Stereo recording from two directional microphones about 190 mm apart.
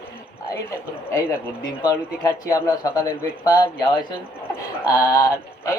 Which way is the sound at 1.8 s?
20° left (ahead or behind).